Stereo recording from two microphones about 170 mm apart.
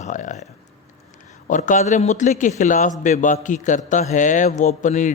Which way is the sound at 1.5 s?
50° left (ahead or behind).